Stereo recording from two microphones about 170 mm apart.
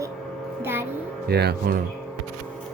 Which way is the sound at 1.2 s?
70° right (ahead or behind).